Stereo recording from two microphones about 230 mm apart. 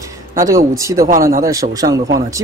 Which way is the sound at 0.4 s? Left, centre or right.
Centre.